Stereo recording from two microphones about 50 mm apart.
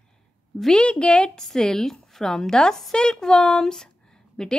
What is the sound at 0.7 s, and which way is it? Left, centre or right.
Speech, left.